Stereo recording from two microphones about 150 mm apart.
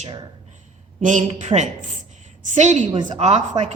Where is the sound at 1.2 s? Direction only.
45° right (ahead or behind).